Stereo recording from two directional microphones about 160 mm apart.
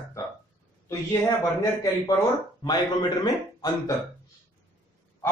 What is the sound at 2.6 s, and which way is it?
Speech, 25° left (ahead or behind).